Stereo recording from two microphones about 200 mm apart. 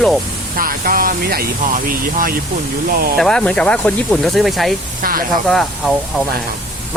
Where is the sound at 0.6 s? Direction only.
45° right (ahead or behind).